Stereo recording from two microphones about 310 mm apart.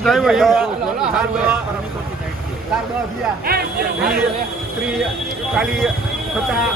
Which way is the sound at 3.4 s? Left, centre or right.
Right.